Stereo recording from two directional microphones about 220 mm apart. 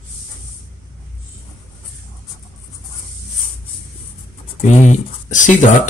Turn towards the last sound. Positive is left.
turn(degrees=35)  # may be behind; listen again after turning